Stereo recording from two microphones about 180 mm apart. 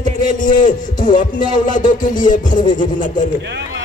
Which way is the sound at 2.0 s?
45° left (ahead or behind).